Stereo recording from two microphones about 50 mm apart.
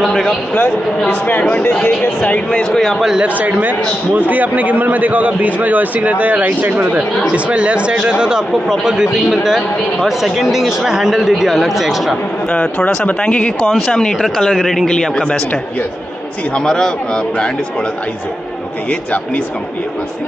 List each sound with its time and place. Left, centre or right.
0.1 s a man's voice: centre
1.0 s speech: left
2.7 s a man's voice: centre
3.2 s a man's voice: right
7.3 s speech: right; by 12.2 s centre
12.4 s speech: left
13.7 s a man's voice: centre
14.9 s a man's voice: centre